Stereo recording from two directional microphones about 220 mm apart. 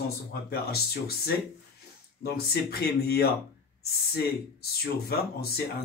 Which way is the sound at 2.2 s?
45° left (ahead or behind).